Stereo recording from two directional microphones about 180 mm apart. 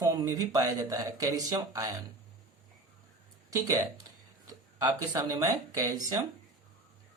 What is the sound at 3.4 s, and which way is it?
Speech, 20° right (ahead or behind).